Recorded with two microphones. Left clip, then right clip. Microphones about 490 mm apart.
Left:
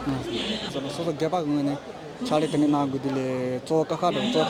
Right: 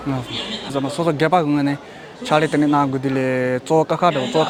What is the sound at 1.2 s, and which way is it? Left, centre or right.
Speech, right.